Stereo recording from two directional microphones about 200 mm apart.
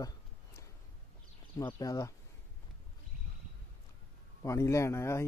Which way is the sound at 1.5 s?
15° left (ahead or behind).